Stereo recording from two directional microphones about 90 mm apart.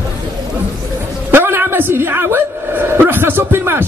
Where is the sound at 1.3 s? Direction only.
25° right (ahead or behind).